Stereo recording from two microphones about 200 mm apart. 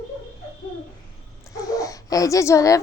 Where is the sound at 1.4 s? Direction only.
15° left (ahead or behind).